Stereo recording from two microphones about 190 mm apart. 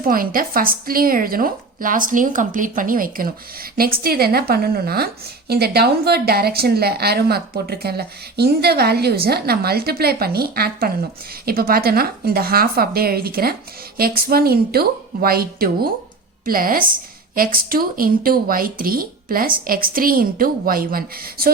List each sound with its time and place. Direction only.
0.0 s a woman's voice: 50° right (ahead or behind)